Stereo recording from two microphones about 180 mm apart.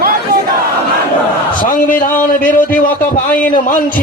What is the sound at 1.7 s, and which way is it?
Speech, 50° left (ahead or behind).